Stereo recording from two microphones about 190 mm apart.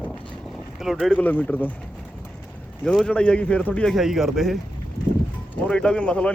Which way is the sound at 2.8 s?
5° left (ahead or behind).